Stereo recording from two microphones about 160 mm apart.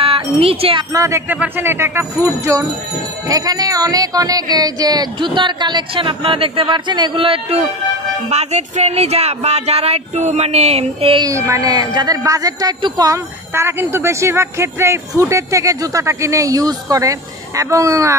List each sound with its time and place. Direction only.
0.0 s speech: 35° right (ahead or behind)
0.9 s speech: 20° right (ahead or behind); by 11.2 s 35° right (ahead or behind)
11.2 s speech: 20° right (ahead or behind)